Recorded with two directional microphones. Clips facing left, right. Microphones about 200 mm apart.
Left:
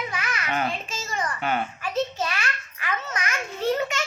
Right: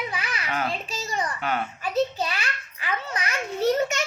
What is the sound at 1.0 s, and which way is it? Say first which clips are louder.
Speech: even; 20° right (ahead or behind).